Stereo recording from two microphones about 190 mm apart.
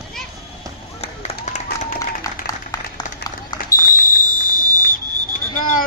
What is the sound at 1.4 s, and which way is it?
Applause, 40° left (ahead or behind).